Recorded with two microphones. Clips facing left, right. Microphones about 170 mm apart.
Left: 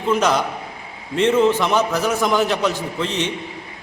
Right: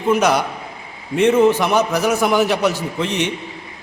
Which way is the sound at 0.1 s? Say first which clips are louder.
Right 2 dB; 15° right (ahead or behind).